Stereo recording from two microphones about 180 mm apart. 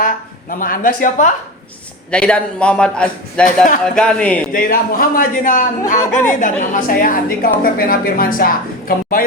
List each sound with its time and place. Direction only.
0.6 s a woman's voice: 50° left (ahead or behind)
2.0 s a man's voice: 5° left (ahead or behind)
3.4 s a woman's voice: 45° left (ahead or behind)
3.9 s speech: 5° left (ahead or behind)
4.5 s a woman's voice: 50° left (ahead or behind)